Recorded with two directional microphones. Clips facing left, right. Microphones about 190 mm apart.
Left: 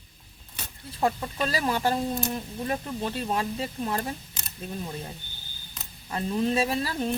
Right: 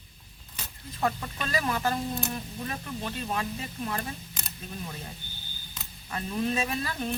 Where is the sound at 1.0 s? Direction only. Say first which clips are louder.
Left 4 dB; 30° left (ahead or behind).